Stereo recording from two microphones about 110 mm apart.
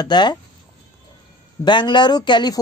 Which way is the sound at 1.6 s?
45° left (ahead or behind).